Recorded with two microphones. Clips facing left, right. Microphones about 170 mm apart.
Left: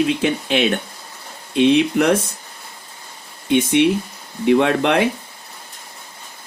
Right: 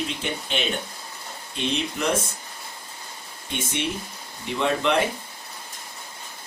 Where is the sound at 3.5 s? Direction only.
65° left (ahead or behind).